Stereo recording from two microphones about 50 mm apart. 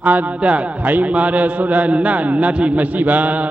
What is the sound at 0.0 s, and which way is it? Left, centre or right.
A man's voice, right.